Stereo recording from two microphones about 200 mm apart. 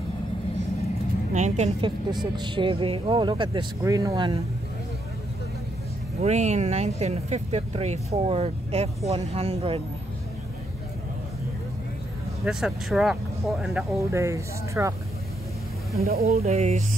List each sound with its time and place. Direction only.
1.3 s a woman's voice: 35° right (ahead or behind)
2.0 s speech: 20° right (ahead or behind)
6.2 s speech: 35° right (ahead or behind)
12.4 s speech: 5° right (ahead or behind)
13.9 s speech: 15° right (ahead or behind)
16.2 s speech: 30° right (ahead or behind)